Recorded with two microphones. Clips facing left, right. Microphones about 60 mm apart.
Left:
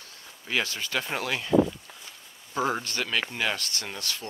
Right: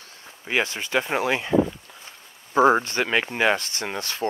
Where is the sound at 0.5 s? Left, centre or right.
Right.